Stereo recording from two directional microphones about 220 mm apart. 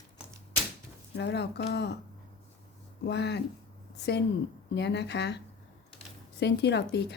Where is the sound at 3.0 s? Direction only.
50° left (ahead or behind).